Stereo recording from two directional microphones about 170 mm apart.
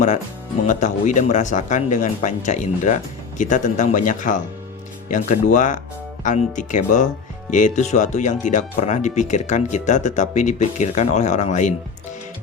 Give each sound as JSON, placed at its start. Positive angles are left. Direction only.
{"t": 0.7, "sound": "speech", "side_deg": 45}